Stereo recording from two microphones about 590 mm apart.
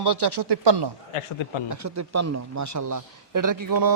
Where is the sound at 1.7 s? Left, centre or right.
Right.